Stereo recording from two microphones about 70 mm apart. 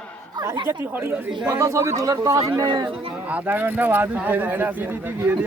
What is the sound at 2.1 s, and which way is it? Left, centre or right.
Speech, right.